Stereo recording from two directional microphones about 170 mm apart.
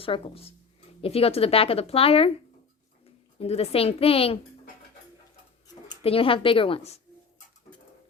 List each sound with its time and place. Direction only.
0.0 s speech: 35° left (ahead or behind)
3.3 s speech: 35° left (ahead or behind)
6.0 s speech: 35° left (ahead or behind)